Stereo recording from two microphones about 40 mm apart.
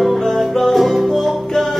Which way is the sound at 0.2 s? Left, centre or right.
Centre.